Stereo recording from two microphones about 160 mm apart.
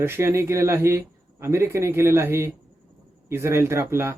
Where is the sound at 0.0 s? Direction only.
15° right (ahead or behind).